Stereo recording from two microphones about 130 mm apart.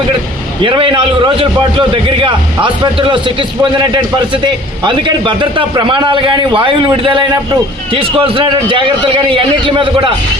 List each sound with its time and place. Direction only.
0.6 s a man's voice: 40° right (ahead or behind)